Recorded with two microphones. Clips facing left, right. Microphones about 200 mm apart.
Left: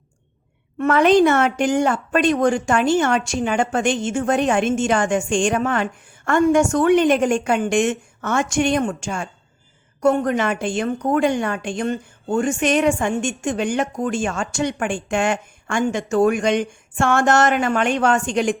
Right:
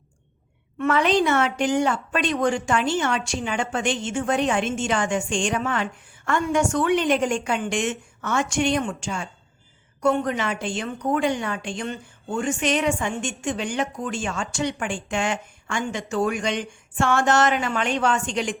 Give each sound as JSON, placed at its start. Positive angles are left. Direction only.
{"t": 0.8, "sound": "a woman's voice", "side_deg": 50}